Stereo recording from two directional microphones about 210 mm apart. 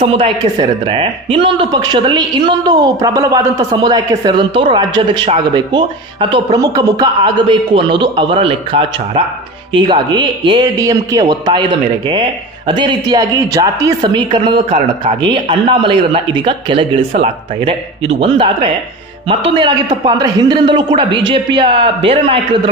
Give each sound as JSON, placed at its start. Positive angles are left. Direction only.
{"t": 0.0, "sound": "speech", "side_deg": -25}